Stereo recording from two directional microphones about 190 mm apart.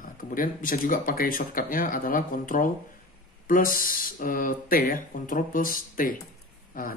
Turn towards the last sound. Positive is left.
turn(degrees=45)  # may be behind; listen again after turning